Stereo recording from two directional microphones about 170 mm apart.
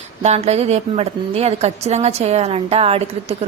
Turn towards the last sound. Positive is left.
turn(degrees=-35)  # may be behind; listen again after turning